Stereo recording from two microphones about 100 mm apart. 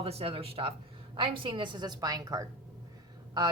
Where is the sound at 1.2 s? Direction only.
55° right (ahead or behind); by 2.4 s 40° right (ahead or behind).